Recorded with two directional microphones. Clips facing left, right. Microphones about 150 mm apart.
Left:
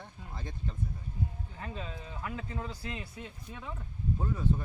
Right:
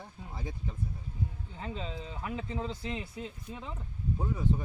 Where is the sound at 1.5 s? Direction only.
20° right (ahead or behind).